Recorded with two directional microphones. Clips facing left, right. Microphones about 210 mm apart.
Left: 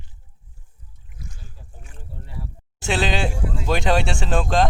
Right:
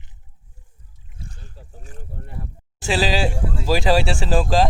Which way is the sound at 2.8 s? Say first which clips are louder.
Right 2 dB; centre (ahead or behind).